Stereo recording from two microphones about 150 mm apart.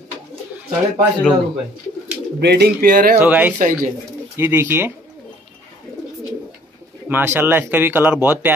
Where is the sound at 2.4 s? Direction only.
90° right; by 3.2 s 75° right (ahead or behind).